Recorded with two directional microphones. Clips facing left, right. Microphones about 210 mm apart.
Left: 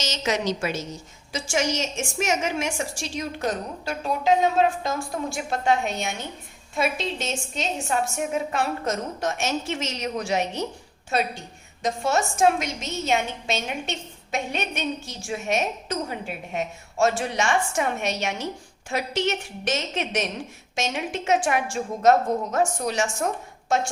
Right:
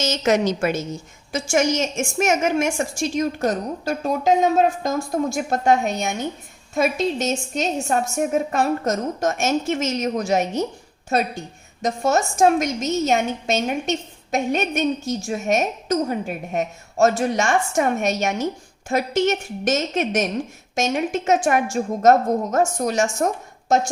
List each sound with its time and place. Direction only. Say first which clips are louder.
0.0 s a woman's voice: right 7 dB; 50° right (ahead or behind)